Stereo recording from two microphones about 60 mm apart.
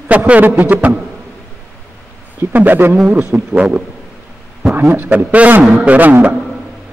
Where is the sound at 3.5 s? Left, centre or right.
Centre.